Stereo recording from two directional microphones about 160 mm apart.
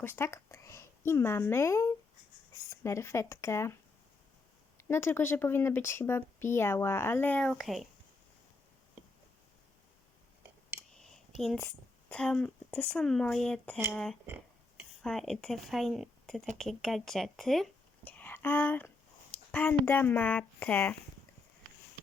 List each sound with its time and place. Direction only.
0.0 s speech: 15° left (ahead or behind)
4.8 s speech: 15° left (ahead or behind); by 7.9 s centre (ahead or behind)
10.9 s speech: 5° left (ahead or behind)